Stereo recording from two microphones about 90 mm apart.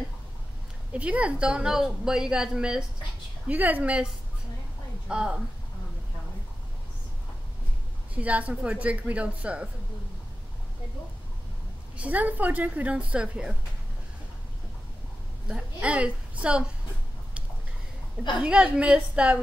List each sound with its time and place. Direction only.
0.9 s a woman's voice: 15° right (ahead or behind)
8.1 s a woman's voice: 15° right (ahead or behind)
12.0 s a woman's voice: 15° right (ahead or behind)
15.4 s a woman's voice: 10° right (ahead or behind)
18.4 s a woman's voice: 10° right (ahead or behind)